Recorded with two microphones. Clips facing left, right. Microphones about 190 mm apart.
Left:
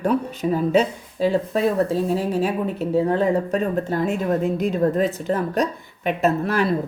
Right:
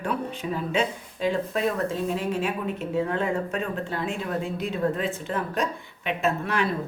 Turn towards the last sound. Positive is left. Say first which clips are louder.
# left 5 dB
turn(degrees=40)  # may be behind; listen again after turning